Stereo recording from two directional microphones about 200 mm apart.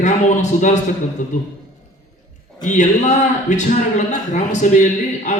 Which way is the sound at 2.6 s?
35° left (ahead or behind).